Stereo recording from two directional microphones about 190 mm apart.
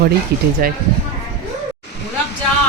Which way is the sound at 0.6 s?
50° right (ahead or behind).